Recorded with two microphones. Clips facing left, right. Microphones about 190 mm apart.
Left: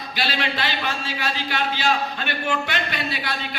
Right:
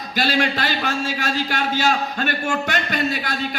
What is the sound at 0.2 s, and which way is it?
A man's voice, 45° right (ahead or behind).